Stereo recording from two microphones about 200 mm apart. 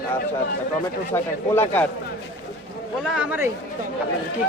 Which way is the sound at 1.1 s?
10° left (ahead or behind).